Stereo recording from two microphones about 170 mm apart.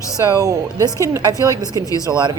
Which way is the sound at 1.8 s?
20° left (ahead or behind).